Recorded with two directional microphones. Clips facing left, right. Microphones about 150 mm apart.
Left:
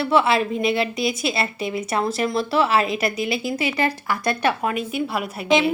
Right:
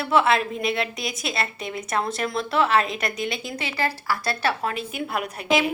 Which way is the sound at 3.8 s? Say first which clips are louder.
Left 3 dB; 20° left (ahead or behind).